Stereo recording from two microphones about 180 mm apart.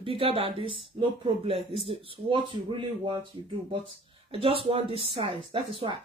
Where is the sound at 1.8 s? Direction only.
30° right (ahead or behind).